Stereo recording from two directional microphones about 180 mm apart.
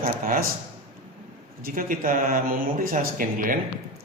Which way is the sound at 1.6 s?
50° right (ahead or behind).